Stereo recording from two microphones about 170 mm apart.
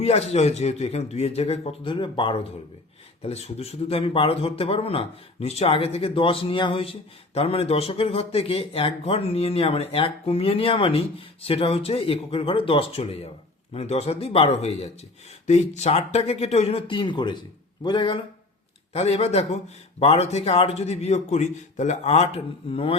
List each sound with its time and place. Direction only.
0.0 s speech: 35° left (ahead or behind)